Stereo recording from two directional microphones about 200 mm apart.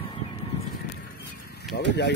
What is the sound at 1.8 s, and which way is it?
Speech, 60° left (ahead or behind).